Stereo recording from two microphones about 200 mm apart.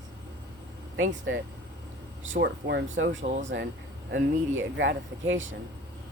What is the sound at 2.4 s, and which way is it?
Speech, 60° right (ahead or behind).